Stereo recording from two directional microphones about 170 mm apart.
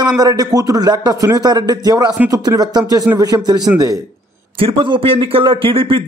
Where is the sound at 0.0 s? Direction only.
25° right (ahead or behind).